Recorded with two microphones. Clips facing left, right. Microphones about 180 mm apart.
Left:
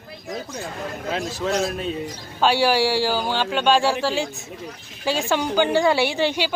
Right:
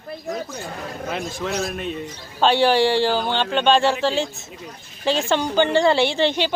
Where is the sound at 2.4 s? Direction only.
10° left (ahead or behind).